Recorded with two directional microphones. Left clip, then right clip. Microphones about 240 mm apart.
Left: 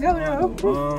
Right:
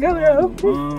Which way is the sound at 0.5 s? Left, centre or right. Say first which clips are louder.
Right 2 dB; centre.